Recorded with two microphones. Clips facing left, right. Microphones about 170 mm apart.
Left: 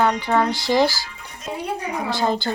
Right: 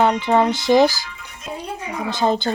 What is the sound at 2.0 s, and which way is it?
Speech, 20° right (ahead or behind).